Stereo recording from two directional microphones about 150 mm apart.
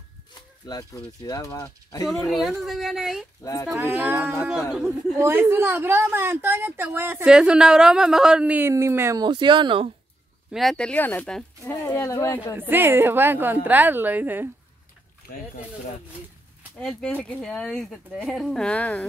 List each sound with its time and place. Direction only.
0.3 s speech: 25° left (ahead or behind)
2.2 s a woman's voice: centre (ahead or behind)
7.2 s speech: 5° right (ahead or behind)
9.2 s speech: 30° right (ahead or behind)
10.5 s speech: centre (ahead or behind); by 12.5 s 20° left (ahead or behind)
12.5 s a woman's voice: 15° right (ahead or behind)
16.8 s speech: 5° left (ahead or behind)